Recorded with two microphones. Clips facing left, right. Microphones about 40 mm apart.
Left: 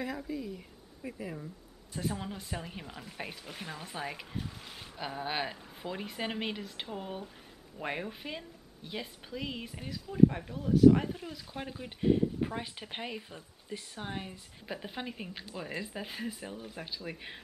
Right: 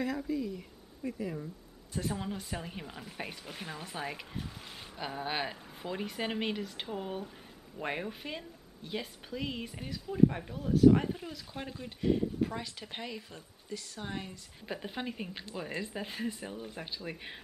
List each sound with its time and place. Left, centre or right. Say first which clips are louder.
0.0 s speech: right 3 dB; centre
14.7 s speech: right 1 dB; centre